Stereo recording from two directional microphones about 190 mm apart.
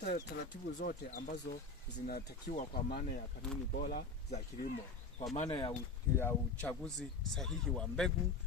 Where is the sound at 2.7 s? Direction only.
50° left (ahead or behind).